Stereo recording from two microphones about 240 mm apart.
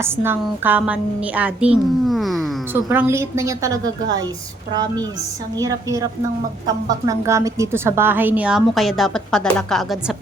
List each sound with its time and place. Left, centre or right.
0.0 s a woman's voice: centre